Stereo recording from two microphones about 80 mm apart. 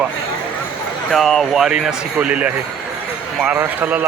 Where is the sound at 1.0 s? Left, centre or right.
Centre; by 4.0 s right.